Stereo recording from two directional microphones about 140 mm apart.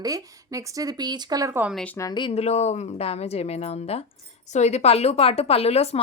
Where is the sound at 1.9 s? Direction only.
30° left (ahead or behind).